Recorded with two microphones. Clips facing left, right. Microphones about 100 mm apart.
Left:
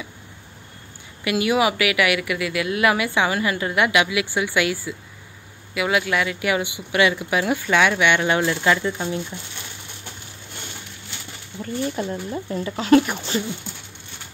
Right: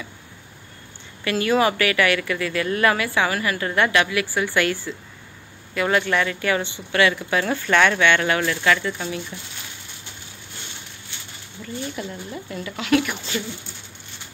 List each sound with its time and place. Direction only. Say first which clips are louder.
1.2 s a woman's voice: even; 15° left (ahead or behind)
11.6 s speech: left 5 dB; 35° left (ahead or behind)